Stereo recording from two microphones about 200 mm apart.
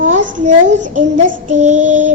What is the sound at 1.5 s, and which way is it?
Child singing, 35° right (ahead or behind).